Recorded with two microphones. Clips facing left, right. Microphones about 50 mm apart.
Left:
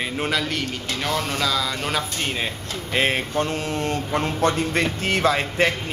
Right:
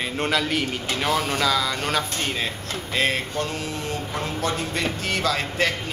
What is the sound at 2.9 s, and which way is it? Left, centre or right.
Speech, left.